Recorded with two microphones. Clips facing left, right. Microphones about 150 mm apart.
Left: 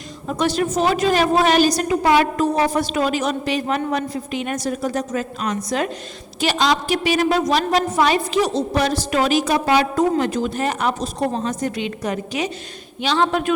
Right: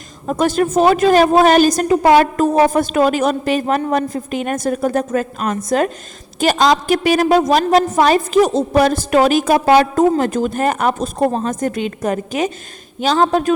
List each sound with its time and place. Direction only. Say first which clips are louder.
0.3 s a woman's voice: right 4 dB; 50° right (ahead or behind)